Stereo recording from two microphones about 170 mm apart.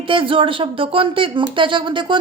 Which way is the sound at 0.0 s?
30° right (ahead or behind).